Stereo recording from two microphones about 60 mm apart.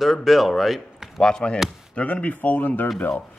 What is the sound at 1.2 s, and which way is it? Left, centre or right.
Speech, centre.